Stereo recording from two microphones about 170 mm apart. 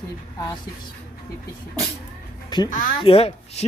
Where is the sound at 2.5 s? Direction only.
30° left (ahead or behind).